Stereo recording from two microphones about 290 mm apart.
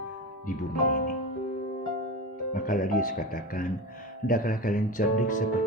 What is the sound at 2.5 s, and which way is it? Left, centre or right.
Speech, left.